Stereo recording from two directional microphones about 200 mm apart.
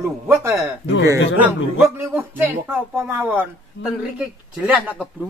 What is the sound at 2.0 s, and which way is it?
Speech, 10° right (ahead or behind).